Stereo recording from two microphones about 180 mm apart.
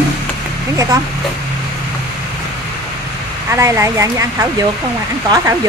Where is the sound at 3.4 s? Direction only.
15° right (ahead or behind).